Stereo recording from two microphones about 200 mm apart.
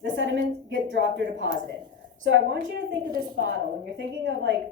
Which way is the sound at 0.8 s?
65° right (ahead or behind).